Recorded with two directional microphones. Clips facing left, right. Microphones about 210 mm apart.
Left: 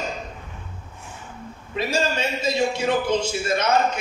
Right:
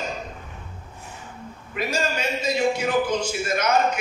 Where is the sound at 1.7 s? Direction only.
25° left (ahead or behind).